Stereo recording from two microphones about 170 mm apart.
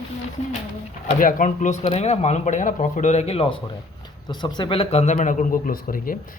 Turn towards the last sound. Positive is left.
turn(degrees=55)  # may be behind; listen again after turning